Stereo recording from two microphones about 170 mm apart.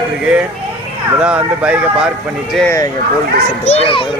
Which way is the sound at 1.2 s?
5° right (ahead or behind).